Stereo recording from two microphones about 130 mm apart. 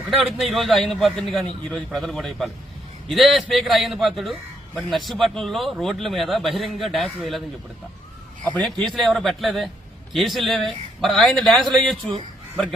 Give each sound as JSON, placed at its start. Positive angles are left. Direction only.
{"t": 0.1, "sound": "a man's voice", "side_deg": 0}
{"t": 8.5, "sound": "a man's voice", "side_deg": 0}